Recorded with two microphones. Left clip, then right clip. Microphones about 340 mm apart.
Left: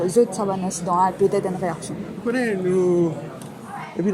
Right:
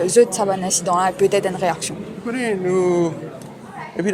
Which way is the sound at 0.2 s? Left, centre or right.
Right.